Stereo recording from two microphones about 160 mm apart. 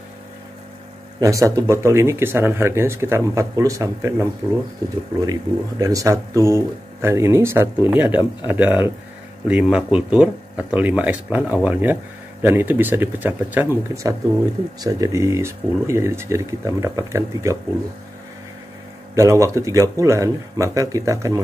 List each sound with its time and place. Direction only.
1.2 s speech: 20° right (ahead or behind)
19.1 s speech: 20° right (ahead or behind)